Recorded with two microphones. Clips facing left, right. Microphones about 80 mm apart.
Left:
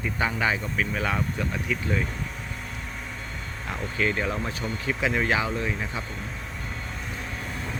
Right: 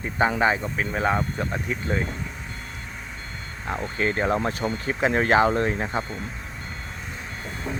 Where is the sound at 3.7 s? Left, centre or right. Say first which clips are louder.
Right 2 dB; right.